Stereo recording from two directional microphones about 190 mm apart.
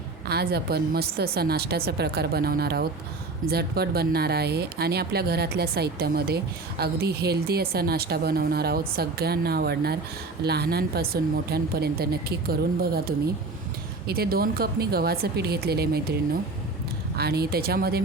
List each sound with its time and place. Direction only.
0.3 s speech: 55° right (ahead or behind)